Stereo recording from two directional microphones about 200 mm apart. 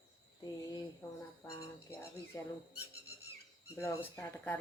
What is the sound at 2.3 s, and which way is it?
Speech, 15° left (ahead or behind).